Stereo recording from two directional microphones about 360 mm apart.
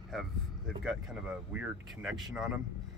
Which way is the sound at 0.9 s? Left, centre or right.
Centre.